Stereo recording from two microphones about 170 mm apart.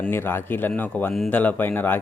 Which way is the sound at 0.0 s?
15° left (ahead or behind).